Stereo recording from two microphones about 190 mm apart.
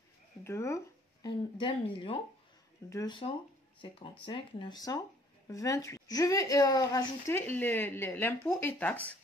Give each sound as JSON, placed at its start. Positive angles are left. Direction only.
{"t": 0.4, "sound": "a woman's voice", "side_deg": 15}